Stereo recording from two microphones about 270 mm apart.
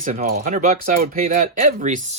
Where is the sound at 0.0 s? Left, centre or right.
Right.